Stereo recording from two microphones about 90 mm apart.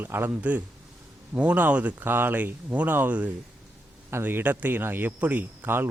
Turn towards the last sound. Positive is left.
turn(degrees=-25)  # may be behind; listen again after turning